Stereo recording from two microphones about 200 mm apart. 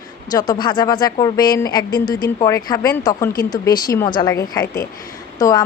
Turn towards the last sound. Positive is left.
turn(degrees=20)  # may be behind; listen again after turning